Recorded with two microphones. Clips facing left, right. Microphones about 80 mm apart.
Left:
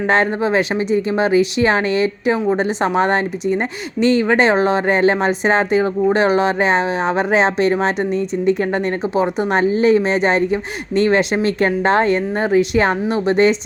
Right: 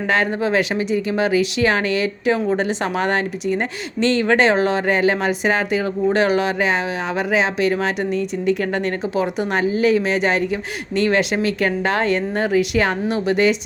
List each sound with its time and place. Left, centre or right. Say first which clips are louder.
0.1 s speech: left 2 dB; left